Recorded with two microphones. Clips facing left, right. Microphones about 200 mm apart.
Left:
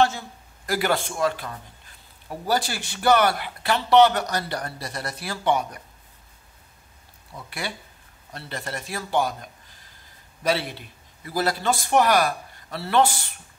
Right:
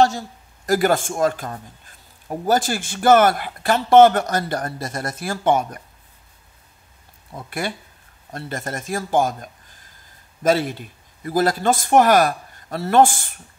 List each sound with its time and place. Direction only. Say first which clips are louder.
0.7 s speech: right 6 dB; 45° right (ahead or behind)
7.3 s speech: right 6 dB; 50° right (ahead or behind)